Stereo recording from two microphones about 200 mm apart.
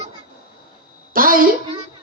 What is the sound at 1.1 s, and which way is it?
Speech, 45° right (ahead or behind).